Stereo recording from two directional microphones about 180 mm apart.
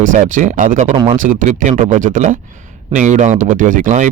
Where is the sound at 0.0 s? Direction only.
45° right (ahead or behind).